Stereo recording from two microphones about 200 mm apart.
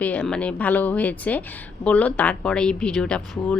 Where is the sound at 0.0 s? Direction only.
5° left (ahead or behind).